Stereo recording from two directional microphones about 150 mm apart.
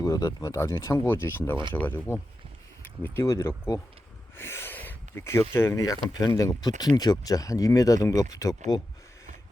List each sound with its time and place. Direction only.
0.0 s speech: 25° left (ahead or behind)